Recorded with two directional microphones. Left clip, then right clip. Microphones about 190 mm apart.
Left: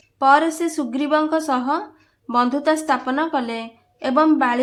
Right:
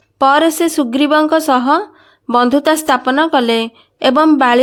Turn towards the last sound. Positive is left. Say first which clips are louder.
# right 7 dB
turn(degrees=-45)  # may be behind; listen again after turning